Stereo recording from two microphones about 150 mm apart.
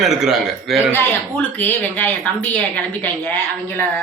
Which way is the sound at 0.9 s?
10° left (ahead or behind).